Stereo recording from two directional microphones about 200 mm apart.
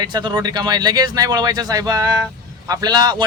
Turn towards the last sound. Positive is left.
turn(degrees=-20)  # may be behind; listen again after turning